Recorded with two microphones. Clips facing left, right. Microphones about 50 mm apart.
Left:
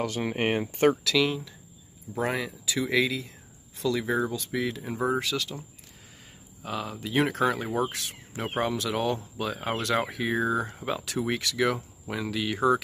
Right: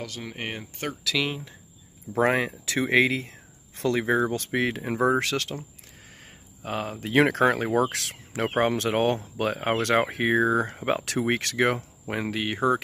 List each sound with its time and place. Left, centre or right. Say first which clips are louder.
0.0 s speech: left 7 dB; left
1.1 s speech: left 3 dB; centre
2.1 s speech: right 6 dB; right
4.3 s speech: right 4 dB; right
6.6 s speech: right 3 dB; right
7.2 s speech: right 5 dB; right